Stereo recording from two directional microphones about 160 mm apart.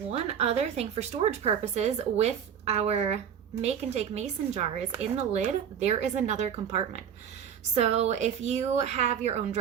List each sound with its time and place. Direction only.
0.1 s a woman's voice: 40° right (ahead or behind)